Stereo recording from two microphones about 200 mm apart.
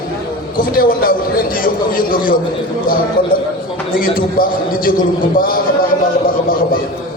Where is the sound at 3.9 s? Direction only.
45° left (ahead or behind).